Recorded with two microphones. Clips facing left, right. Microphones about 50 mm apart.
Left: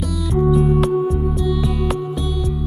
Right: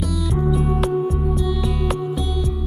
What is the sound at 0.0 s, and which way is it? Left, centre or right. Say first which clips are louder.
Music: left 3 dB; centre.